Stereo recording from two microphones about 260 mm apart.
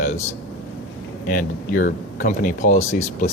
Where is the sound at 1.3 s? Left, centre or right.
Left.